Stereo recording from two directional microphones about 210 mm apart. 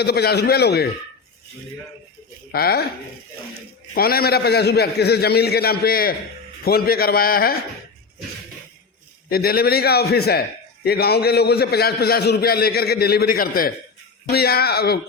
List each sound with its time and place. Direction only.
0.0 s a man's voice: 50° left (ahead or behind)
2.5 s a man's voice: 50° left (ahead or behind)
3.9 s a man's voice: 45° left (ahead or behind)
9.3 s a man's voice: 45° left (ahead or behind)